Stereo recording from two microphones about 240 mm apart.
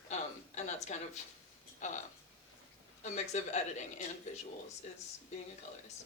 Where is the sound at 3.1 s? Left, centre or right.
Left.